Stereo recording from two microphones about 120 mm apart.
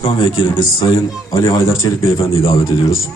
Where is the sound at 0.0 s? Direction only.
45° left (ahead or behind).